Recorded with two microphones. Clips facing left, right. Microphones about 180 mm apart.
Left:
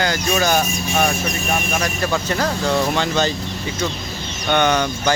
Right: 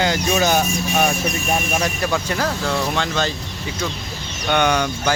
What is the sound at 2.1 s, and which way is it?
Speech, 5° right (ahead or behind).